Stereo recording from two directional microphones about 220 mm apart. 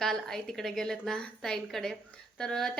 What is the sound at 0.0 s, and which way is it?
A woman's voice, centre (ahead or behind).